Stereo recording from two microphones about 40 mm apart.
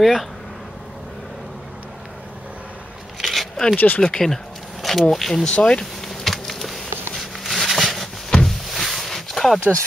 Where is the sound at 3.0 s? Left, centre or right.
Centre.